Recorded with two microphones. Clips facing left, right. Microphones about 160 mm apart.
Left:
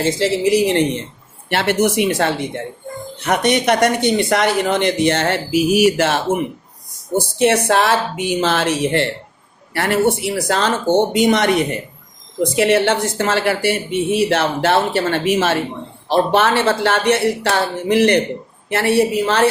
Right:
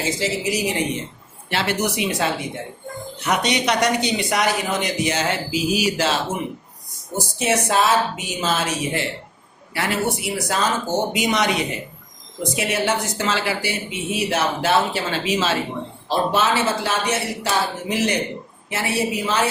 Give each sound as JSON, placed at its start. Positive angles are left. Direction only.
{"t": 0.0, "sound": "a woman's voice", "side_deg": 60}
{"t": 7.3, "sound": "a woman's voice", "side_deg": 60}
{"t": 10.9, "sound": "speech", "side_deg": 25}
{"t": 11.3, "sound": "a woman's voice", "side_deg": 55}